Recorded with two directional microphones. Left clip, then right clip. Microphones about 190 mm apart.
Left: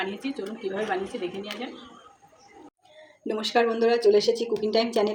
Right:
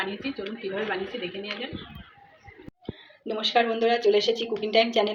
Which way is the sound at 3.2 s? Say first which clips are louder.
Even; 40° left (ahead or behind).